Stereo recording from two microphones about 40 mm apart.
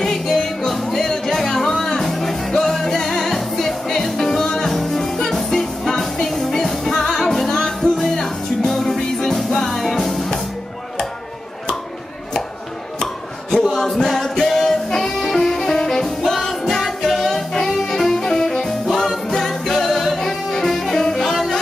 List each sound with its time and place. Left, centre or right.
0.0 s music: centre
13.0 s a sound: centre
13.7 s music: centre
21.3 s music: centre